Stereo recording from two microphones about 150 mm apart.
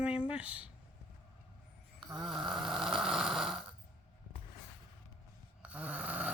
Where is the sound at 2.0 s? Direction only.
Centre (ahead or behind).